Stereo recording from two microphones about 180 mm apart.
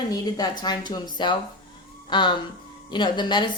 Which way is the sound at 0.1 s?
20° left (ahead or behind).